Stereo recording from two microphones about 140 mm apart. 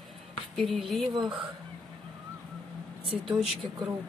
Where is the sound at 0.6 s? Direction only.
Centre (ahead or behind).